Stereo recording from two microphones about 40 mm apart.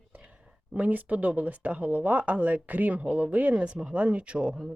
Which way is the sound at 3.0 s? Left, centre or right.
Right.